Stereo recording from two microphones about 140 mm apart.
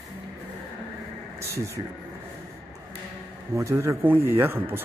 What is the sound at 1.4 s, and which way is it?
Speech, 20° right (ahead or behind).